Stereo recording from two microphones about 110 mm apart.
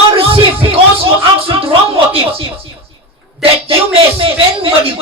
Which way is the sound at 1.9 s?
55° right (ahead or behind).